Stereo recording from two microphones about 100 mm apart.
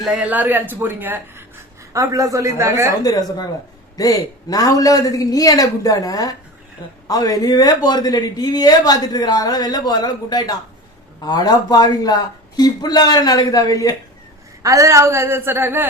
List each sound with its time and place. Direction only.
0.0 s speech: centre (ahead or behind)
0.3 s a woman's voice: 15° right (ahead or behind)
1.9 s a woman's voice: 35° right (ahead or behind)
3.0 s a man's voice: 40° left (ahead or behind)
14.6 s a woman's voice: 35° right (ahead or behind)